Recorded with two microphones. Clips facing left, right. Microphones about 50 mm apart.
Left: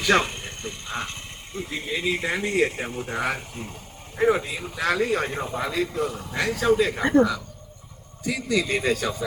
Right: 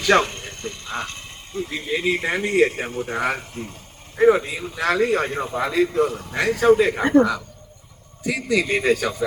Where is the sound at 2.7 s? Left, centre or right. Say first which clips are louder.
Right 3 dB; right.